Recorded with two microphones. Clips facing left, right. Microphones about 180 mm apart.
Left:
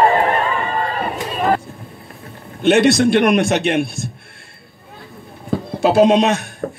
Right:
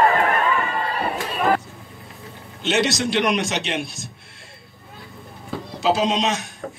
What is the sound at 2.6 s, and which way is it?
A man's voice, 55° left (ahead or behind).